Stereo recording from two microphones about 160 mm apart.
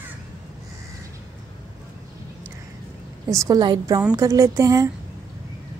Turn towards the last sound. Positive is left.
turn(degrees=-20)  # may be behind; listen again after turning